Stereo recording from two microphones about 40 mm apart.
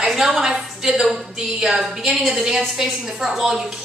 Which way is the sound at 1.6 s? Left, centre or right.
Centre.